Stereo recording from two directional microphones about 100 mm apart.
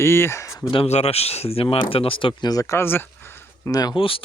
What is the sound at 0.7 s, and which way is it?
Speech, 80° left.